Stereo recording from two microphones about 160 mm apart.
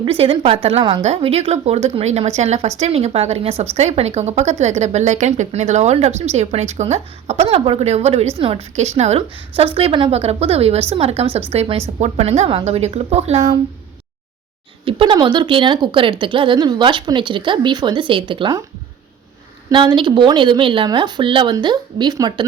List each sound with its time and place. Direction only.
0.0 s a woman's voice: 35° right (ahead or behind)
14.8 s speech: 30° right (ahead or behind)
19.7 s speech: 30° right (ahead or behind)